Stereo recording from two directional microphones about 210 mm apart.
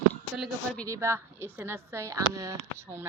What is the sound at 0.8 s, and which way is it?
Mantra, 15° right (ahead or behind).